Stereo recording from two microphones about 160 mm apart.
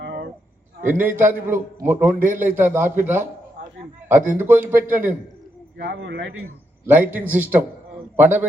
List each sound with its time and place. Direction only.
0.0 s a sound: 90° right
0.9 s a man's voice: 10° right (ahead or behind)
5.7 s a man's voice: 90° right
6.8 s a man's voice: 10° right (ahead or behind)